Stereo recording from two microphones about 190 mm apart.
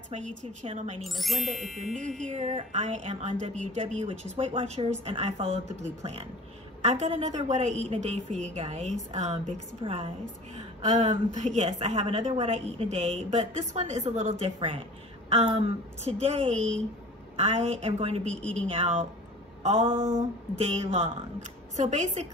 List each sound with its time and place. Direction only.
0.1 s a woman's voice: 40° right (ahead or behind)
1.0 s speech: centre (ahead or behind)
2.2 s a woman's voice: 40° right (ahead or behind)
18.3 s speech: 5° left (ahead or behind)
18.7 s a woman's voice: 30° right (ahead or behind)
19.6 s a sound: 35° right (ahead or behind)
19.9 s a sound: 15° right (ahead or behind)
20.2 s a woman's voice: 35° right (ahead or behind)